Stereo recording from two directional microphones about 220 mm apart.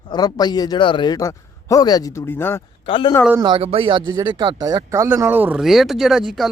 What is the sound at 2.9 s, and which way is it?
Speech, 25° left (ahead or behind).